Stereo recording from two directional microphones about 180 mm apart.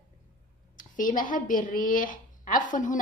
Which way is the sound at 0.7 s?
50° left (ahead or behind).